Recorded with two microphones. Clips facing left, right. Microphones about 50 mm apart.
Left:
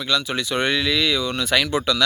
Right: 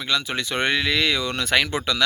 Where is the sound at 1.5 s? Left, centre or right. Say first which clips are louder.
Left 1 dB; right.